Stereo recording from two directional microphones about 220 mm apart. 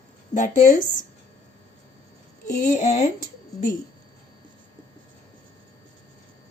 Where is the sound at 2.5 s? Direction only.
35° left (ahead or behind).